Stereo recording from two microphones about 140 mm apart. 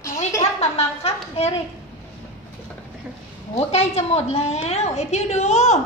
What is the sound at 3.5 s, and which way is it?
A woman's voice, 45° left (ahead or behind).